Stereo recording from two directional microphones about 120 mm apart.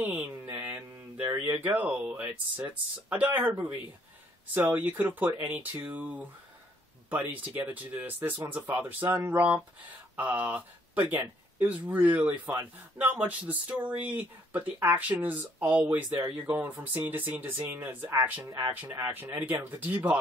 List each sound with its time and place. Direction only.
0.0 s speech: 10° right (ahead or behind)
18.9 s speech: 25° right (ahead or behind)